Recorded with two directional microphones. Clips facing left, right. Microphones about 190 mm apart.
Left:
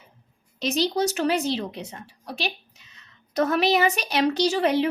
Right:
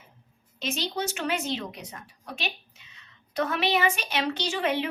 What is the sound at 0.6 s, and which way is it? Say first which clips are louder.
A woman's voice: left 7 dB; 35° left (ahead or behind).